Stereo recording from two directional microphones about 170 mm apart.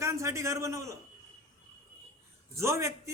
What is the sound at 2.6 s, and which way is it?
Speech, 15° right (ahead or behind).